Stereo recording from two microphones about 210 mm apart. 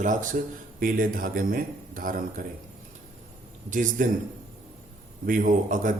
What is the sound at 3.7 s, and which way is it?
Speech, 40° right (ahead or behind).